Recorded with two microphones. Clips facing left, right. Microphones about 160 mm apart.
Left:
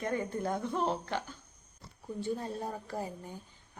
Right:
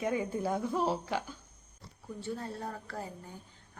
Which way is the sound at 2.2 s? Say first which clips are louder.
Left 3 dB; 15° left (ahead or behind).